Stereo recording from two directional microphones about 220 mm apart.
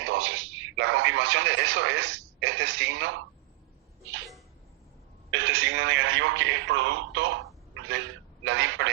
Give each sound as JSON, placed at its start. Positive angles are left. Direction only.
{"t": 0.0, "sound": "radio", "side_deg": -60}
{"t": 5.3, "sound": "a man's voice", "side_deg": -55}